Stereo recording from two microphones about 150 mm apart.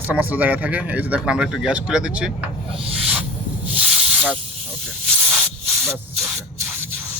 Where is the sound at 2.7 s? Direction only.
40° right (ahead or behind).